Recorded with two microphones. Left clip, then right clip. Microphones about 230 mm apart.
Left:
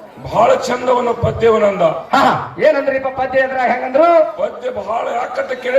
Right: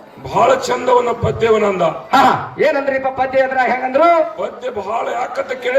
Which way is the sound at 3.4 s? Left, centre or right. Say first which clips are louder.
Even; right.